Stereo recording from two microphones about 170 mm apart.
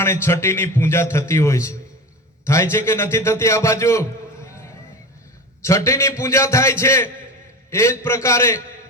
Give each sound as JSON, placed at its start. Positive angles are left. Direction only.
{"t": 0.0, "sound": "a man's voice", "side_deg": 15}
{"t": 4.4, "sound": "a sound", "side_deg": 15}
{"t": 5.6, "sound": "a man's voice", "side_deg": 15}